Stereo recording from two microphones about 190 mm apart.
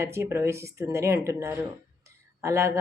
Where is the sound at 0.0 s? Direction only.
15° right (ahead or behind).